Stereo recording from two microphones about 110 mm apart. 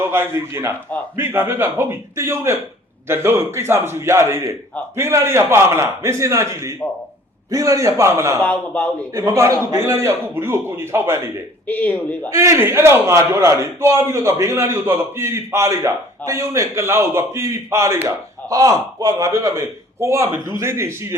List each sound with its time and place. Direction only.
0.0 s a man's voice: 20° right (ahead or behind)
8.4 s speech: 10° left (ahead or behind)
9.1 s a man's voice: 30° right (ahead or behind)
11.7 s speech: 15° left (ahead or behind)
12.3 s a man's voice: 25° right (ahead or behind)